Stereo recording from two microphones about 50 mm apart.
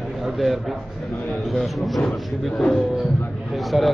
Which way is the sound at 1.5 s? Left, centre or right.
Centre.